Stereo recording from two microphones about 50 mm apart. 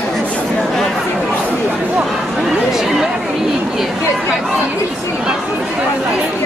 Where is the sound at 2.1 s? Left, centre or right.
Centre.